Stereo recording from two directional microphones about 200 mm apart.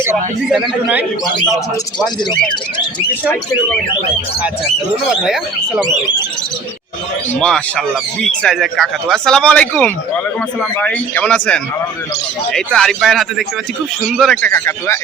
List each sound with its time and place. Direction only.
0.0 s a man's voice: 10° right (ahead or behind)
4.6 s speech: centre (ahead or behind)
7.3 s speech: 5° left (ahead or behind)